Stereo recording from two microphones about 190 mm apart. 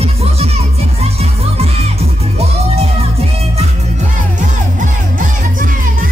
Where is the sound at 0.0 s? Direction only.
30° right (ahead or behind).